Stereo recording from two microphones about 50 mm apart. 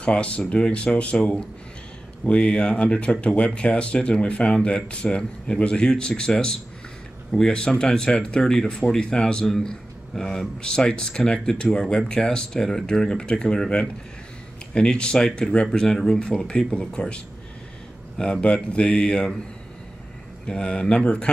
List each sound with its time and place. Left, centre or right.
0.0 s speech: left
20.4 s speech: centre